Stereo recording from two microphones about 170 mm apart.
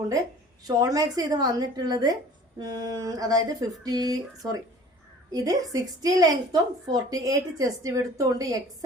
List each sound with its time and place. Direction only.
0.7 s a woman's voice: 20° right (ahead or behind)